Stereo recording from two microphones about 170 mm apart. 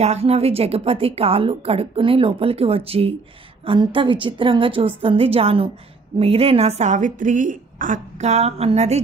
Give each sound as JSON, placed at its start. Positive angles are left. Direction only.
{"t": 0.0, "sound": "a woman's voice", "side_deg": -40}